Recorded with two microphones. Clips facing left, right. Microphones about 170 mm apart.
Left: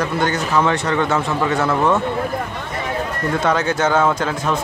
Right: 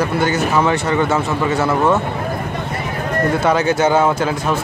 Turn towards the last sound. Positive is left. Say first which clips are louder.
# right 2 dB
turn(degrees=-10)  # may be behind; listen again after turning